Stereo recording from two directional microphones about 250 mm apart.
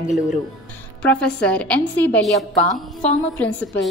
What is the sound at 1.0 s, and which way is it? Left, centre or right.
A woman's voice, centre.